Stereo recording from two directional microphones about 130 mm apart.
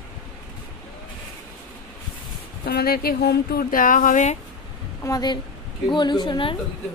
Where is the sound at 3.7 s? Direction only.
90° left; by 4.3 s 70° left (ahead or behind).